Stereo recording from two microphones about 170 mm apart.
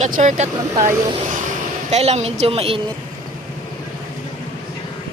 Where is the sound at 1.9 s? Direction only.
40° right (ahead or behind).